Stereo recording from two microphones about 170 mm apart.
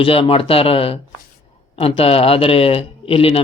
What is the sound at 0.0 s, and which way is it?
Speech, 35° left (ahead or behind).